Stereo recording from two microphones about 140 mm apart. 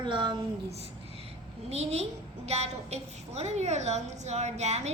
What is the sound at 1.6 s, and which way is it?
A woman's voice, 50° right (ahead or behind).